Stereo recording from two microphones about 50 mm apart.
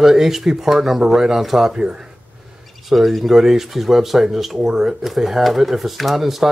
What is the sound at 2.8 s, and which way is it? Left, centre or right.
Speech, centre.